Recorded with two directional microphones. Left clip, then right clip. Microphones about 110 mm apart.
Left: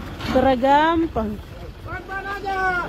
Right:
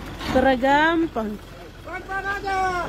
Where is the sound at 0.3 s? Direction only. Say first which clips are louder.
Left 2 dB; centre (ahead or behind).